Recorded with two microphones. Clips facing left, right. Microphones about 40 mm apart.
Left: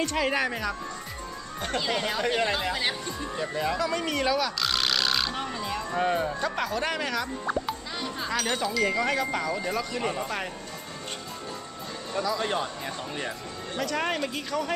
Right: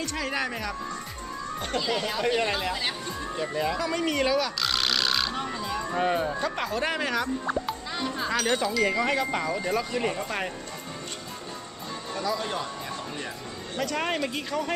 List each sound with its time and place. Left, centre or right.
0.0 s speech: left
0.3 s speech: centre
5.5 s music: centre
5.8 s speech: centre
7.4 s a child's voice: centre
12.4 s speech: left
13.7 s speech: centre